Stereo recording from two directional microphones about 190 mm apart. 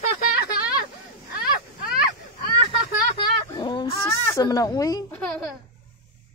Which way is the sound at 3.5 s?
25° left (ahead or behind).